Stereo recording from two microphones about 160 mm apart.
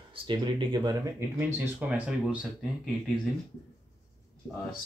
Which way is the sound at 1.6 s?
10° right (ahead or behind).